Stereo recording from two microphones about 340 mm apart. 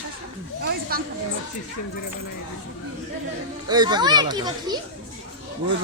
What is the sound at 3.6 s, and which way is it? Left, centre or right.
A child's voice, centre.